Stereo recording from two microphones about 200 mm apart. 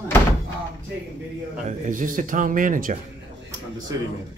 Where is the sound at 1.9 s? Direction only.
40° right (ahead or behind).